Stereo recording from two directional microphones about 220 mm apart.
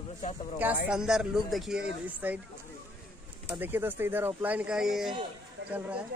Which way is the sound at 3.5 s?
10° right (ahead or behind).